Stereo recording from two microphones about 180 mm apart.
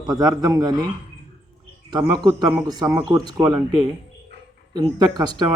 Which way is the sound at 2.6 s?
20° right (ahead or behind).